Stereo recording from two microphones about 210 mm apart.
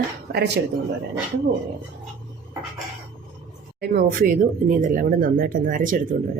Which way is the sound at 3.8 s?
45° right (ahead or behind).